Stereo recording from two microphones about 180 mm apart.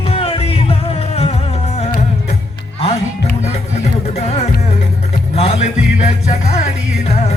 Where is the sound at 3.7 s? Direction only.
35° left (ahead or behind).